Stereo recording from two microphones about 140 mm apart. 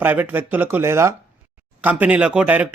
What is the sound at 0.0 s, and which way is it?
Speech, 15° right (ahead or behind).